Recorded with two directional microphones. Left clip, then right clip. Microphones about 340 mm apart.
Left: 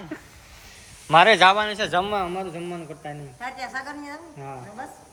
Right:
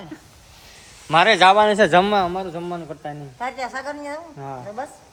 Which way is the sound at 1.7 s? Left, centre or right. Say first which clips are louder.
Right 8 dB; right.